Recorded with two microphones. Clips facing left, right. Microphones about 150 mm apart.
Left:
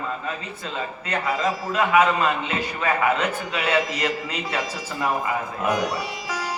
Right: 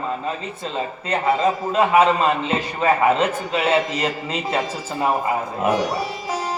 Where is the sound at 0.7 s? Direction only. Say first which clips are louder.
Right 4 dB; 30° right (ahead or behind).